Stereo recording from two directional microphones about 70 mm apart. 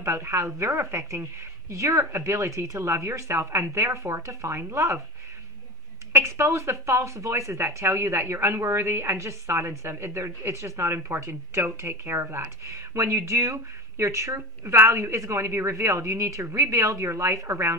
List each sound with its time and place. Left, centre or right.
0.0 s speech: right
6.1 s speech: right